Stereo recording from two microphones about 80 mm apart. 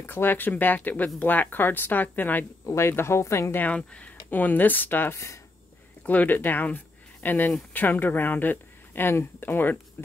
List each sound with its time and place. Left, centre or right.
0.0 s speech: left
2.6 s speech: left
3.6 s speech: centre; by 5.4 s left
6.0 s speech: left